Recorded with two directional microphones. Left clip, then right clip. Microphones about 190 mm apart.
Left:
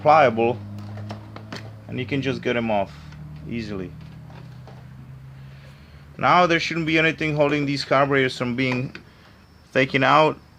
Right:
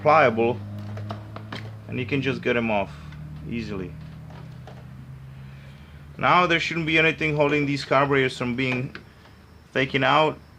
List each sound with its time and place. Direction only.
0.0 s speech: 15° left (ahead or behind)
1.9 s speech: 15° left (ahead or behind)
6.1 s speech: 20° left (ahead or behind)